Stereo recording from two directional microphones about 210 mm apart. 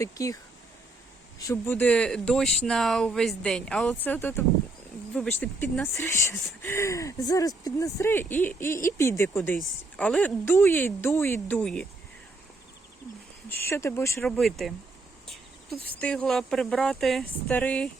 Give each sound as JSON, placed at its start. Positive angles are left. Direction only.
{"t": 0.0, "sound": "speech", "side_deg": 15}
{"t": 1.4, "sound": "speech", "side_deg": 15}
{"t": 13.5, "sound": "speech", "side_deg": 10}
{"t": 14.3, "sound": "speech", "side_deg": 0}
{"t": 16.0, "sound": "speech", "side_deg": 5}